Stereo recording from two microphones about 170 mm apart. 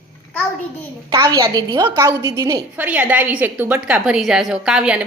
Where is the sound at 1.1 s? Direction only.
25° right (ahead or behind).